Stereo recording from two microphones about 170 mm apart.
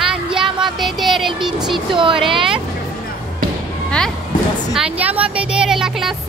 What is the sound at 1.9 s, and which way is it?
Speech, 30° right (ahead or behind).